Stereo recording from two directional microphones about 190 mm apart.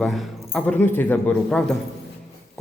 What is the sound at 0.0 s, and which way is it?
Speech, centre (ahead or behind).